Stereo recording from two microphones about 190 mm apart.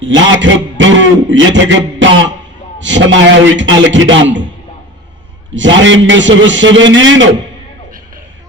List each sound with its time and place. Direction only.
0.0 s a man's voice: 80° right
5.5 s a man's voice: 80° right